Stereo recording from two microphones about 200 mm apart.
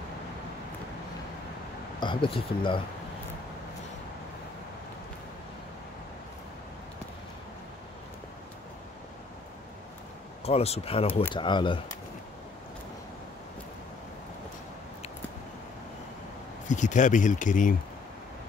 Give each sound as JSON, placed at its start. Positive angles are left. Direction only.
{"t": 2.0, "sound": "speech", "side_deg": 25}
{"t": 10.4, "sound": "speech", "side_deg": 30}
{"t": 16.6, "sound": "speech", "side_deg": 40}